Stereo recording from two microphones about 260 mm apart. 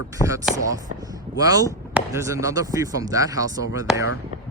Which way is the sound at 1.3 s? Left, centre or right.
Centre.